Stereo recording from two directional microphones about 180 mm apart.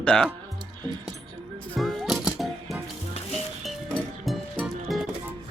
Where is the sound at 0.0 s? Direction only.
5° left (ahead or behind).